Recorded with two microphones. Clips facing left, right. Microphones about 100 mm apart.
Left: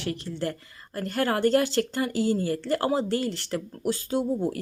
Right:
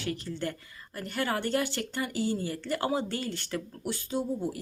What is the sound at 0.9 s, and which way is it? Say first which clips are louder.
A woman's voice: left 5 dB; 35° left (ahead or behind).